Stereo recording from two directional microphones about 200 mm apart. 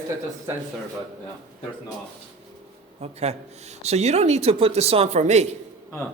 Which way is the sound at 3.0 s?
35° right (ahead or behind).